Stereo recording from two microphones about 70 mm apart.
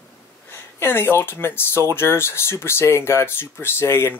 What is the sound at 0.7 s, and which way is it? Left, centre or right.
Speech, left.